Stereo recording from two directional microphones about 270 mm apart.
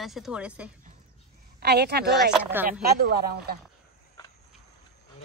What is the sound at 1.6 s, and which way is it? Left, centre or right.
Speech, right.